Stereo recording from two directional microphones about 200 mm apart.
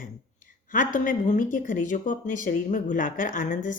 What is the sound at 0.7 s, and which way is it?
Speech, 40° left (ahead or behind).